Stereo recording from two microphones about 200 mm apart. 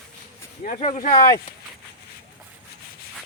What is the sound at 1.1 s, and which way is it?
Speech, 15° left (ahead or behind).